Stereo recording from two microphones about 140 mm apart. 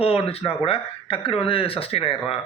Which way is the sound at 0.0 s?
45° left (ahead or behind).